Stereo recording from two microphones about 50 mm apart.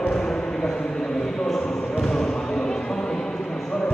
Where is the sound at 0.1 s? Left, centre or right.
Centre.